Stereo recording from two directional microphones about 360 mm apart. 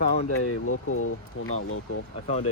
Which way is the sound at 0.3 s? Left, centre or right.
Left.